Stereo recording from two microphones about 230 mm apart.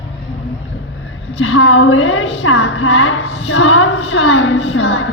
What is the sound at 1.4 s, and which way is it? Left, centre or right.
A woman's voice, left.